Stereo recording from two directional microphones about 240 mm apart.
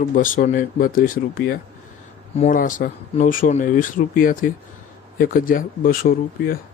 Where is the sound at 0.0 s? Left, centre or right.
Left.